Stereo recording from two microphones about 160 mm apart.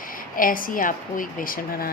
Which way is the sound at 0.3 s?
60° left (ahead or behind).